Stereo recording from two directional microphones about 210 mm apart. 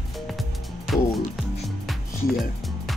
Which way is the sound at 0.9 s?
Centre (ahead or behind).